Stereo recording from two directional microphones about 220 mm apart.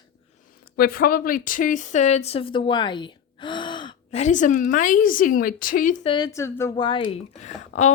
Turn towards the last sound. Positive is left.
turn(degrees=30)  # may be behind; listen again after turning